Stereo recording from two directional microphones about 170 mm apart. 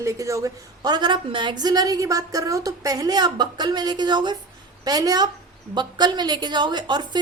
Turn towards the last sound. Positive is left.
turn(degrees=-25)  # may be behind; listen again after turning